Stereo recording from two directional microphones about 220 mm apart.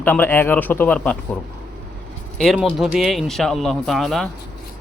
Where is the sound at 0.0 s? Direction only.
10° left (ahead or behind).